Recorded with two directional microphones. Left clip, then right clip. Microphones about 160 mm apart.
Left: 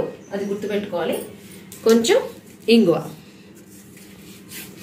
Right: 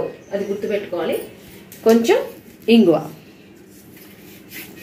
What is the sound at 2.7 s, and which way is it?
Speech, 35° right (ahead or behind).